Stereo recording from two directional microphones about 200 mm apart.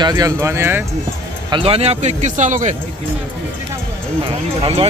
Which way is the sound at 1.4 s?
25° right (ahead or behind).